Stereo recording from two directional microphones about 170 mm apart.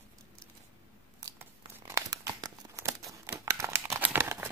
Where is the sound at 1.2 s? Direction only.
15° right (ahead or behind).